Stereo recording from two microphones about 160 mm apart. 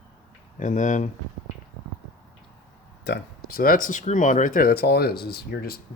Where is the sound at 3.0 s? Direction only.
90° left.